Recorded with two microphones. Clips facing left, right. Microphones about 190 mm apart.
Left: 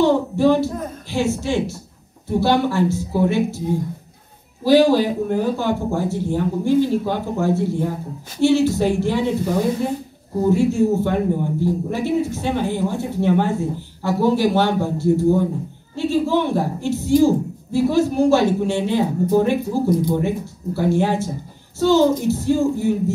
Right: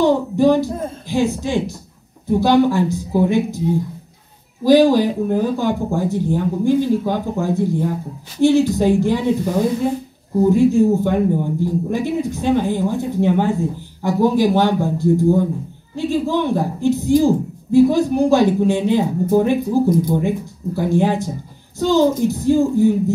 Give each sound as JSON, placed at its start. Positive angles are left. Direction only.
{"t": 0.0, "sound": "a woman's voice", "side_deg": -15}
{"t": 4.6, "sound": "a woman's voice", "side_deg": -15}
{"t": 10.5, "sound": "a woman's voice", "side_deg": -15}